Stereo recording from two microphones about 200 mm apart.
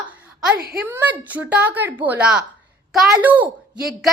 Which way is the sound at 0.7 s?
10° right (ahead or behind).